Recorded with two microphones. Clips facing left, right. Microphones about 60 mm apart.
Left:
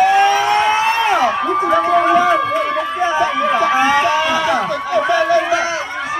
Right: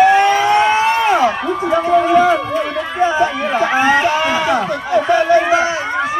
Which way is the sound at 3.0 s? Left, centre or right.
Right.